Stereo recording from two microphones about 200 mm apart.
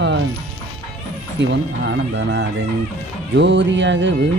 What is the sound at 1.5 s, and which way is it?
Music, 65° right (ahead or behind).